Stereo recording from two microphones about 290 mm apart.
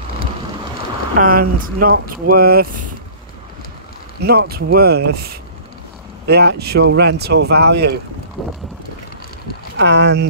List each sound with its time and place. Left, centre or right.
1.1 s speech: right
4.2 s speech: right
9.8 s speech: right